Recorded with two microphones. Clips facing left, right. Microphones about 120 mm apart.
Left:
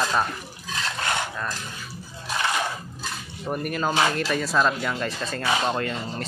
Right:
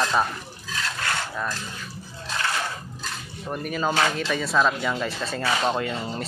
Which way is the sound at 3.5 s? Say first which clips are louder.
Even; 5° left (ahead or behind).